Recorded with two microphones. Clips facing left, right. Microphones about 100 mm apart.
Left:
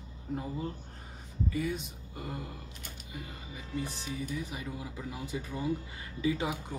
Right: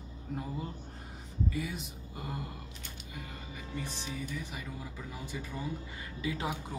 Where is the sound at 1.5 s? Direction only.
Centre (ahead or behind).